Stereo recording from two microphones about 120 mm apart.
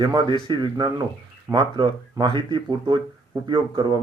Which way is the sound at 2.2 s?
35° right (ahead or behind).